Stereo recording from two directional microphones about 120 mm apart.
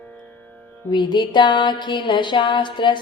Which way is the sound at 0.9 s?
40° left (ahead or behind).